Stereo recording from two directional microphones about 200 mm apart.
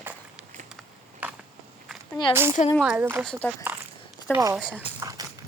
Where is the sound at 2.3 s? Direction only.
10° right (ahead or behind).